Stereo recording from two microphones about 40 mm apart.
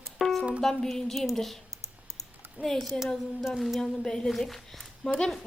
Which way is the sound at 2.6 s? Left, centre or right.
Centre.